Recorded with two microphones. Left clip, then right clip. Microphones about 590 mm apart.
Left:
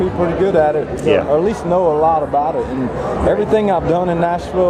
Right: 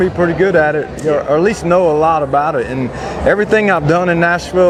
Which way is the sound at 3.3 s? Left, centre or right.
Right.